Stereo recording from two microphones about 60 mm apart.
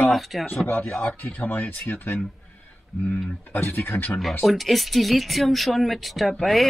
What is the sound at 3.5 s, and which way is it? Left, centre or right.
Speech, left.